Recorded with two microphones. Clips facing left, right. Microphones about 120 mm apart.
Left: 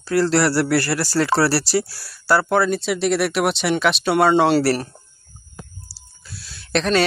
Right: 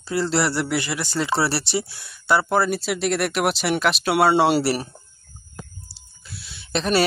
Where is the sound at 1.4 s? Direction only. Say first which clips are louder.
Left 4 dB; 5° left (ahead or behind).